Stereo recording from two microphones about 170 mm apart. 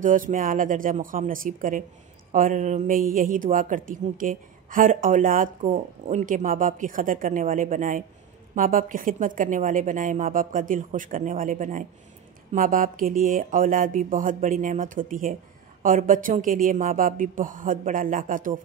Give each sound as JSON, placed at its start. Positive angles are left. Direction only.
{"t": 0.0, "sound": "speech", "side_deg": -50}